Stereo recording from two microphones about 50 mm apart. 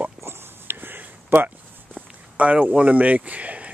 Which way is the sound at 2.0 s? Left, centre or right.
Right.